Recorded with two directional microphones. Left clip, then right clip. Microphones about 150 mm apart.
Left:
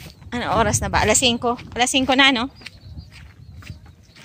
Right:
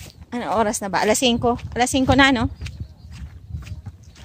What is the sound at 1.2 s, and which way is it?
Speech, 40° right (ahead or behind).